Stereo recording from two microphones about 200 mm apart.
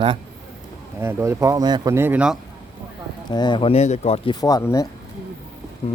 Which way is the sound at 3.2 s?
20° left (ahead or behind).